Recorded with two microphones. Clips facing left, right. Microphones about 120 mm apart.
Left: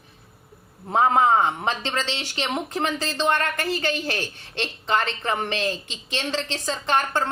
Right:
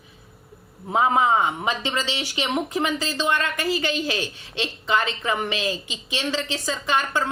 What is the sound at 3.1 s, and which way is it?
Speech, 55° left (ahead or behind).